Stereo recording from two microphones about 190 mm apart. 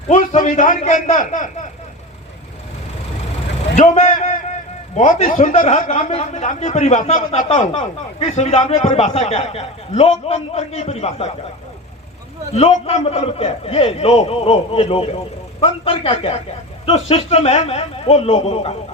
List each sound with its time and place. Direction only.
0.1 s speech: 40° left (ahead or behind)
3.8 s a man's voice: 40° left (ahead or behind)
12.5 s a man's voice: 35° left (ahead or behind)